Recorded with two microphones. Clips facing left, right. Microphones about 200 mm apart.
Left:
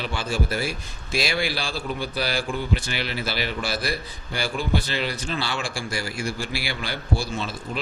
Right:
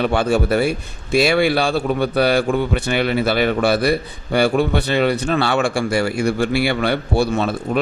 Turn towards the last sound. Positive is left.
turn(degrees=-60)  # may be behind; listen again after turning